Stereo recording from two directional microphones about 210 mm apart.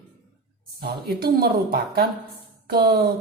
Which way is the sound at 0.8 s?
45° right (ahead or behind).